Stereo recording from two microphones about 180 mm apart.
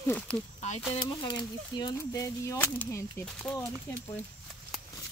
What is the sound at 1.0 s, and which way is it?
Speech, 25° left (ahead or behind).